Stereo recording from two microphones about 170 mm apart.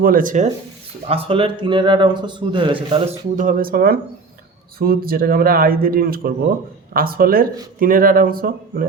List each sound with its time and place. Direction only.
0.0 s speech: 55° right (ahead or behind)
1.0 s a man's voice: 35° right (ahead or behind)
3.3 s speech: 55° right (ahead or behind)